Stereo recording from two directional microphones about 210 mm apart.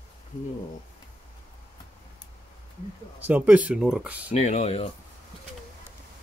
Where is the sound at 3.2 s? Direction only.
5° right (ahead or behind).